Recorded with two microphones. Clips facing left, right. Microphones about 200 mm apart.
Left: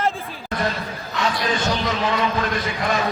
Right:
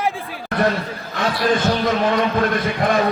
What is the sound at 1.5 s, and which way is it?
Speech, 55° right (ahead or behind).